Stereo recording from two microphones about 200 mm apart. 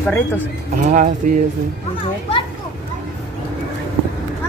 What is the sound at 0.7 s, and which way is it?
Speech, 40° right (ahead or behind).